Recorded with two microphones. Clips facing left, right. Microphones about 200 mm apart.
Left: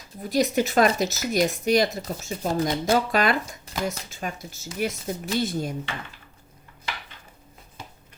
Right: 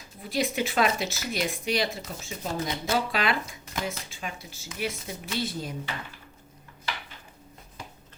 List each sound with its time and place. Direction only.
0.2 s speech: 40° left (ahead or behind)